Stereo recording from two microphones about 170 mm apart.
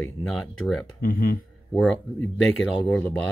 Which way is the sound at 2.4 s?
10° left (ahead or behind).